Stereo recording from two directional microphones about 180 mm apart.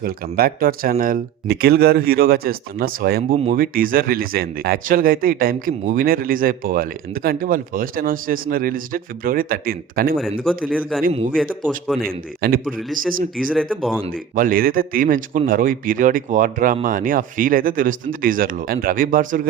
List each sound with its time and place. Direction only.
0.0 s speech: 55° right (ahead or behind)
10.4 s a man's voice: 5° left (ahead or behind)
12.0 s speech: 55° right (ahead or behind)
13.5 s a man's voice: centre (ahead or behind)
14.1 s speech: 50° right (ahead or behind)